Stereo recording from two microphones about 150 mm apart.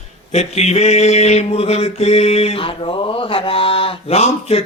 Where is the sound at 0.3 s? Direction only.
45° left (ahead or behind).